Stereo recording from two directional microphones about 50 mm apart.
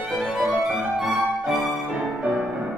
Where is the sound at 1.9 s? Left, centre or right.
Right.